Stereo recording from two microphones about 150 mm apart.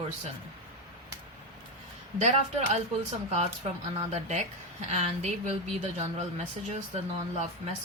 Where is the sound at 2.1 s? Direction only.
45° right (ahead or behind).